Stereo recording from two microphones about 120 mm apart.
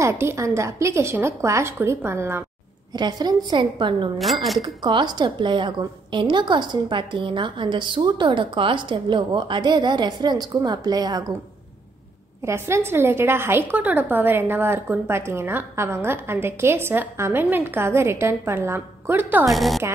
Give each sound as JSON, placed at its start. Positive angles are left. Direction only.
{"t": 0.0, "sound": "a woman's voice", "side_deg": -20}
{"t": 2.9, "sound": "a woman's voice", "side_deg": -35}
{"t": 4.2, "sound": "speech", "side_deg": 0}
{"t": 4.6, "sound": "a woman's voice", "side_deg": -40}
{"t": 12.4, "sound": "a woman's voice", "side_deg": -20}
{"t": 19.5, "sound": "speech", "side_deg": 0}